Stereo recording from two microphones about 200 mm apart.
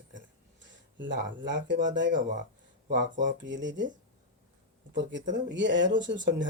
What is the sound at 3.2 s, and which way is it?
Speech, 65° right (ahead or behind).